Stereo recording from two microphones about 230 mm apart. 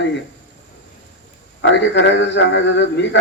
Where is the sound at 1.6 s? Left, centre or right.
Left.